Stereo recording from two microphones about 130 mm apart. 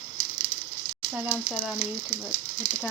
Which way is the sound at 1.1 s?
10° right (ahead or behind).